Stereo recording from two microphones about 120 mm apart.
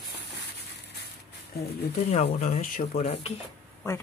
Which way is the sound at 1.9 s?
70° left (ahead or behind).